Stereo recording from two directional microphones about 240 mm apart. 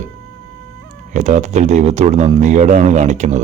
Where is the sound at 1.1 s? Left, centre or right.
Right.